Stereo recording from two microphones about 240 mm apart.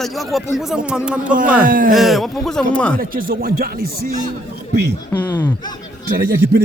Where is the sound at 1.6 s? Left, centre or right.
Right.